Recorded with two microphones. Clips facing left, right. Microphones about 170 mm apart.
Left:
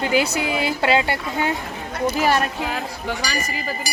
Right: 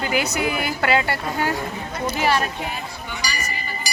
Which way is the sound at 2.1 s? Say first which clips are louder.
Left 1 dB; 45° left (ahead or behind).